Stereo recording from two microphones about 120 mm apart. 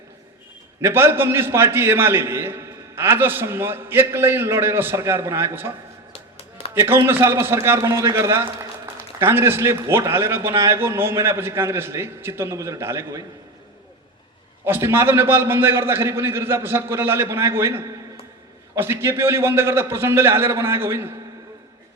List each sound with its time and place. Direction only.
0.8 s a man's voice: 20° right (ahead or behind)
6.1 s a sound: 50° left (ahead or behind)
6.7 s a man's voice: 20° right (ahead or behind)
14.6 s a man's voice: 20° right (ahead or behind)